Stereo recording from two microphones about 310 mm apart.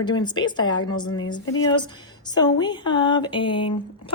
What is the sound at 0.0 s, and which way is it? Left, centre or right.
Speech, centre.